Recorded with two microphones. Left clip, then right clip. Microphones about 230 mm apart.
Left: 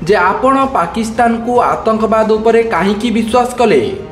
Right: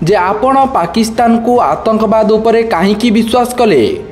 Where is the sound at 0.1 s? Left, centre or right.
Right.